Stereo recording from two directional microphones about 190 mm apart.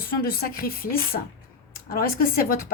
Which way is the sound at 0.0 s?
50° left (ahead or behind).